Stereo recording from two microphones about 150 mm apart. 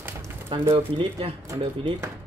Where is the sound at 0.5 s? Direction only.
35° right (ahead or behind).